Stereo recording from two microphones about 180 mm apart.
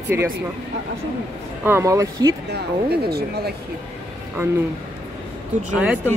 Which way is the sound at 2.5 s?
60° right (ahead or behind).